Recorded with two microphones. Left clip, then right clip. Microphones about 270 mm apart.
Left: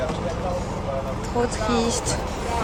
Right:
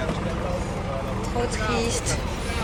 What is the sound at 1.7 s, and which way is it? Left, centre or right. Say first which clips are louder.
Speech: left 3 dB; centre.